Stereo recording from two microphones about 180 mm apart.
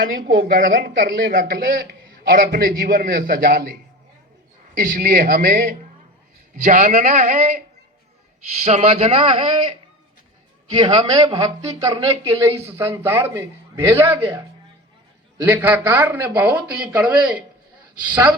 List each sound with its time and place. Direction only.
0.3 s a woman's voice: 80° right
0.9 s a man's voice: 60° right (ahead or behind)
4.8 s a man's voice: 55° right (ahead or behind)
8.6 s a man's voice: 35° right (ahead or behind); by 18.3 s 10° right (ahead or behind)